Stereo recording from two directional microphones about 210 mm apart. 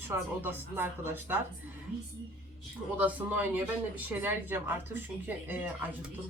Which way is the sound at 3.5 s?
10° right (ahead or behind).